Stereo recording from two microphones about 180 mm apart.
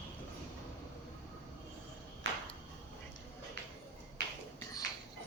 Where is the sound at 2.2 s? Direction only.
90° right.